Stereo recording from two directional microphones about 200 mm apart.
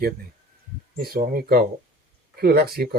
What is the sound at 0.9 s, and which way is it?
Speech, 50° right (ahead or behind).